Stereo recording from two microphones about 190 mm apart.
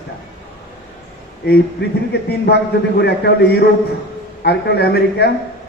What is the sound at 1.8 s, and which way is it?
Speech, 70° left (ahead or behind).